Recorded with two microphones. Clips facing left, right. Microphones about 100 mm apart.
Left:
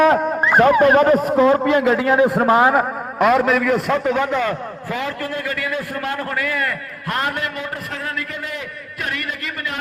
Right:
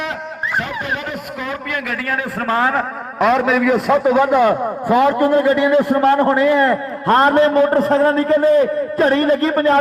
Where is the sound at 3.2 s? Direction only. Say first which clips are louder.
Right 1 dB; centre (ahead or behind).